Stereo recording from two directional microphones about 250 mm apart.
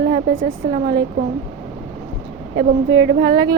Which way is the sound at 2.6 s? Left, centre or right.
Right.